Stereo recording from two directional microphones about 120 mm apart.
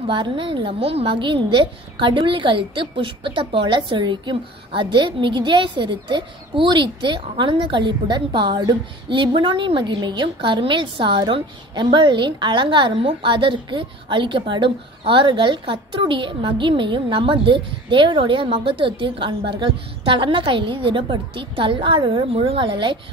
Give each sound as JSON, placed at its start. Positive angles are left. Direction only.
{"t": 0.0, "sound": "a woman's voice", "side_deg": -45}